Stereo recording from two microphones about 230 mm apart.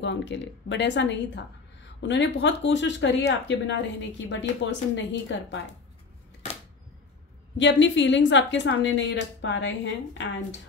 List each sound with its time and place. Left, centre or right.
0.0 s a woman's voice: left
7.5 s a woman's voice: left